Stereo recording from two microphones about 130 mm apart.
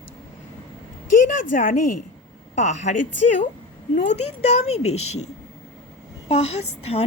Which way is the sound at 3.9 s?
55° left (ahead or behind).